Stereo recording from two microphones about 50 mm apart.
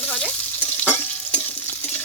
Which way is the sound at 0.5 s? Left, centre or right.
Left.